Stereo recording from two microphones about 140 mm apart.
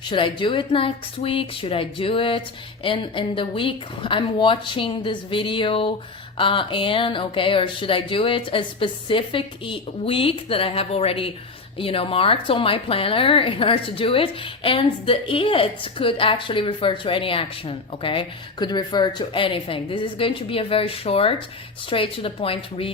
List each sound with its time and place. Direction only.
0.0 s a woman's voice: 35° left (ahead or behind)